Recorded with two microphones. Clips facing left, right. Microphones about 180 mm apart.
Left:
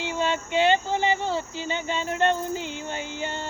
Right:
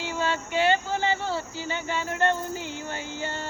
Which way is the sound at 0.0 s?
20° left (ahead or behind).